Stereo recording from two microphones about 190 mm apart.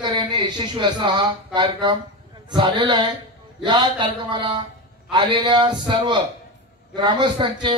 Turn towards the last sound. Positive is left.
turn(degrees=-25)  # may be behind; listen again after turning